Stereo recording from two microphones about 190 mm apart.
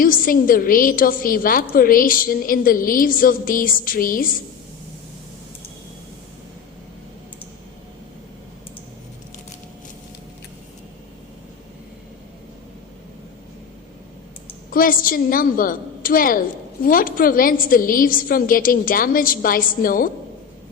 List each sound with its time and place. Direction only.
0.0 s a woman's voice: 50° left (ahead or behind)
14.7 s a woman's voice: 50° left (ahead or behind)